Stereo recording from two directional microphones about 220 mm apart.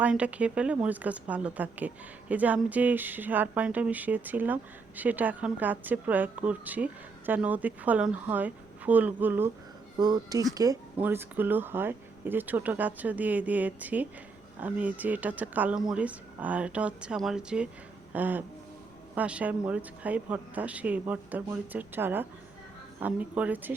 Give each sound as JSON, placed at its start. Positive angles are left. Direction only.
{"t": 0.0, "sound": "speech", "side_deg": -5}